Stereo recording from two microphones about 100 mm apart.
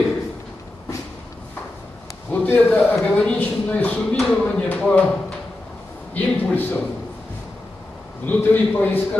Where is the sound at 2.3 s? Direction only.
20° left (ahead or behind).